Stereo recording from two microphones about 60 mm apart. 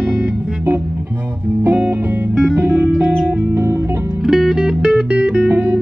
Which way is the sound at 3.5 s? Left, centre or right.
Right.